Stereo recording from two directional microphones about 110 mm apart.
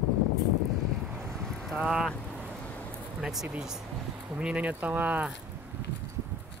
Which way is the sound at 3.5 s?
5° right (ahead or behind).